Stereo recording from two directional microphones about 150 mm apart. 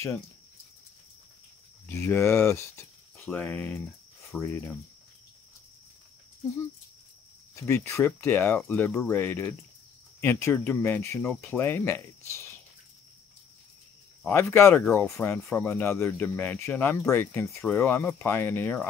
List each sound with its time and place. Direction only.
1.9 s speech: 15° left (ahead or behind)
7.6 s speech: 15° left (ahead or behind)
14.2 s speech: 15° left (ahead or behind)